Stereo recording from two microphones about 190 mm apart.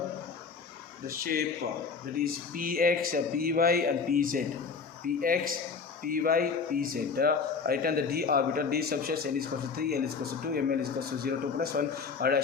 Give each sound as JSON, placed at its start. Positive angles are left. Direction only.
{"t": 1.0, "sound": "speech", "side_deg": -50}
{"t": 11.2, "sound": "speech", "side_deg": -55}